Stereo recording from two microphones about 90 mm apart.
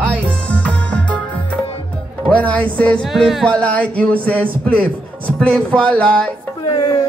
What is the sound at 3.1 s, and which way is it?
Music, centre (ahead or behind).